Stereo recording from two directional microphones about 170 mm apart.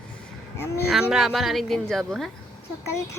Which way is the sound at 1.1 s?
Centre (ahead or behind).